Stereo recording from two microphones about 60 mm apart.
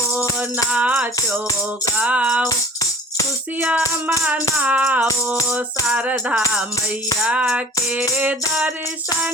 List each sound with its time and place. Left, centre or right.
0.2 s music: right
3.6 s music: right